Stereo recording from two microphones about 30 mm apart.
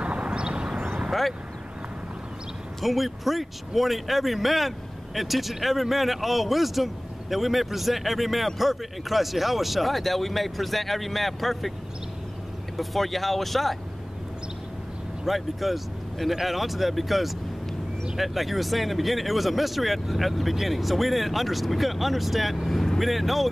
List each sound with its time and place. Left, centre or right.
0.0 s vehicle: right
2.8 s speech: centre
12.7 s speech: centre
15.2 s speech: centre